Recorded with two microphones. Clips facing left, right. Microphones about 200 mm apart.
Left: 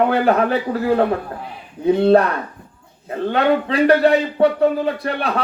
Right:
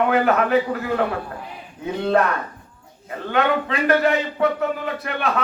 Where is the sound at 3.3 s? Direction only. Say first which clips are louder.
Left 3 dB; 35° left (ahead or behind).